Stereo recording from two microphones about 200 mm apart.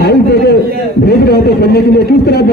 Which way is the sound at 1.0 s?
50° left (ahead or behind).